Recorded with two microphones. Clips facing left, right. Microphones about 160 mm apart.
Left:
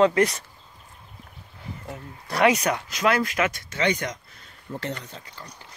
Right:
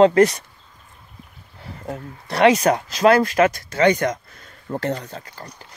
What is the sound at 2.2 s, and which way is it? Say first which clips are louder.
Speech: right 5 dB; 25° right (ahead or behind).